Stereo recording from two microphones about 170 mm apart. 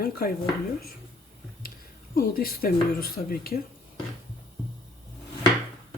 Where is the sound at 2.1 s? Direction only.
60° left (ahead or behind).